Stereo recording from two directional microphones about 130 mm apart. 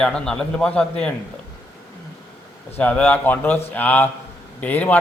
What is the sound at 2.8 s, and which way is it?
A man's voice, 10° left (ahead or behind).